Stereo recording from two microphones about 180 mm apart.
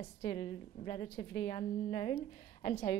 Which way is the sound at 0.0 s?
35° left (ahead or behind).